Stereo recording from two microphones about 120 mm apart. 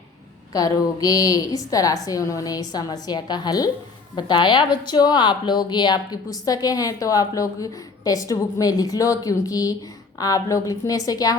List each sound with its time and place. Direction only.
0.5 s a woman's voice: 30° left (ahead or behind)